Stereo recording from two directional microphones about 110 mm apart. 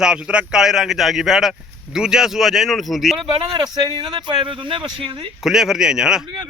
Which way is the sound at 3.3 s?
40° right (ahead or behind).